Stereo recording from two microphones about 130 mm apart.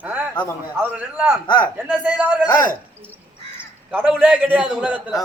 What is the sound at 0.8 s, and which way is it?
Speech, 10° right (ahead or behind).